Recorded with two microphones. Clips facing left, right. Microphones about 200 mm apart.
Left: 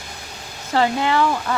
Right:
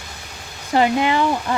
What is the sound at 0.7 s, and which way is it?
Speech, 15° right (ahead or behind).